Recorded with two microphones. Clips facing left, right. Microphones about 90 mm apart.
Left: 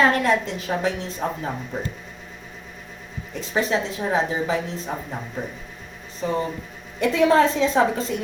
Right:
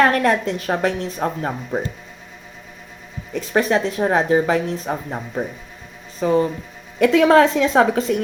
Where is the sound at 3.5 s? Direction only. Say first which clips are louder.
Right 5 dB; 70° right (ahead or behind).